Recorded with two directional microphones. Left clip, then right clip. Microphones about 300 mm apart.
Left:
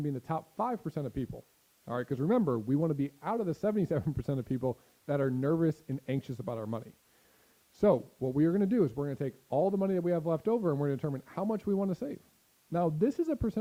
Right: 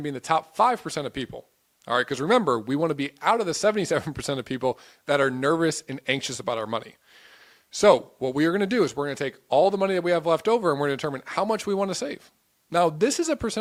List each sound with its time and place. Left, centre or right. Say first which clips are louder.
0.0 s speech: right 11 dB; centre
10.6 s speech: right 9 dB; centre
10.8 s speech: right 8 dB; centre